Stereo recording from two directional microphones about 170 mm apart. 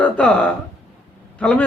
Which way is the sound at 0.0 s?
5° left (ahead or behind).